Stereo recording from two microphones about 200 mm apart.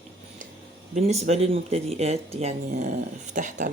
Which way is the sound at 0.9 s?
30° right (ahead or behind).